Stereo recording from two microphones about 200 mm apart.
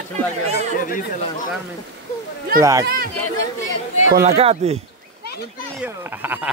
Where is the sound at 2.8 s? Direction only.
45° right (ahead or behind).